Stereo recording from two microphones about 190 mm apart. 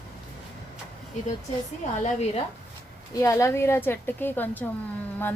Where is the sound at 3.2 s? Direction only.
15° left (ahead or behind).